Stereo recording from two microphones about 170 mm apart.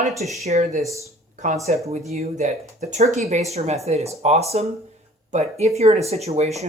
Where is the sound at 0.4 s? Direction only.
40° right (ahead or behind).